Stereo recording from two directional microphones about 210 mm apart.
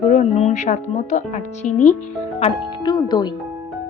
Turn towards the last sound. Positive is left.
turn(degrees=20)  # may be behind; listen again after turning